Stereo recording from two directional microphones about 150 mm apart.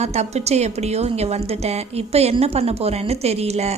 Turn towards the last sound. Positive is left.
turn(degrees=-45)  # may be behind; listen again after turning